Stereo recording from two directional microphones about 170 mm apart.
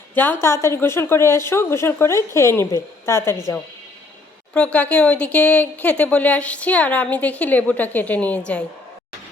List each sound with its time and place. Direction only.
0.1 s a woman's voice: 10° left (ahead or behind)